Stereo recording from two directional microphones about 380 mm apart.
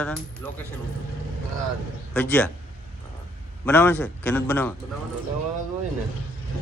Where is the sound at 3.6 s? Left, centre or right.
Centre.